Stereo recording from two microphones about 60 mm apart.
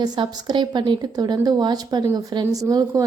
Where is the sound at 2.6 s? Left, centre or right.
Right.